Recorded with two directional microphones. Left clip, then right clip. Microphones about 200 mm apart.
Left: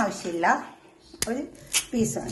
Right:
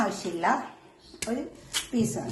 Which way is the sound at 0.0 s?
40° left (ahead or behind).